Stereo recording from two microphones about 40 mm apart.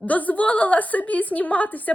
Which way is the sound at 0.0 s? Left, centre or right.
Left.